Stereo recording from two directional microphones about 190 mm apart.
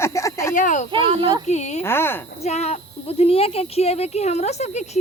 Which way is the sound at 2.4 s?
35° left (ahead or behind).